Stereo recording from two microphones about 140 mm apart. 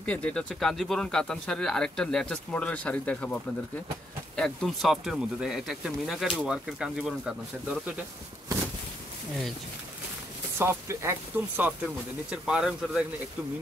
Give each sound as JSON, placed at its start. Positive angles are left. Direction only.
{"t": 0.0, "sound": "speech", "side_deg": 10}
{"t": 4.4, "sound": "speech", "side_deg": 0}
{"t": 10.6, "sound": "speech", "side_deg": -20}